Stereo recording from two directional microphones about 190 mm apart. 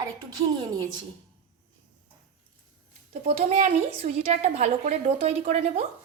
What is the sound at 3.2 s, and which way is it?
A woman's voice, 35° right (ahead or behind).